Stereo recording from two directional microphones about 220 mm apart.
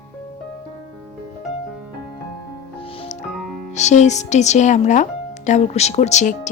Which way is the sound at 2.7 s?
25° left (ahead or behind).